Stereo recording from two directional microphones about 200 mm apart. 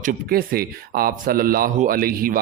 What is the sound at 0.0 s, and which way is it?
Speech, 45° right (ahead or behind).